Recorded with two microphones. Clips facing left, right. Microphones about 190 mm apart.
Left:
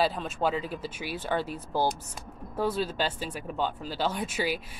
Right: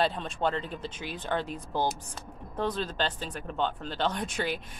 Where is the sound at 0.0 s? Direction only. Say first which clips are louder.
Left 1 dB; 5° left (ahead or behind).